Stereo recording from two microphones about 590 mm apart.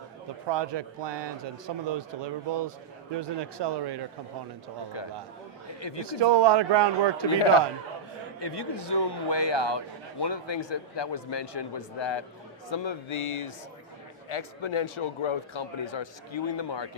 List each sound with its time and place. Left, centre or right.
0.4 s a man's voice: right
5.8 s a man's voice: left
6.1 s a man's voice: right
8.4 s a man's voice: left